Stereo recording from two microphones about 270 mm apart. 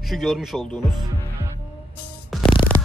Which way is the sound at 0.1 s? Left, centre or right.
Centre.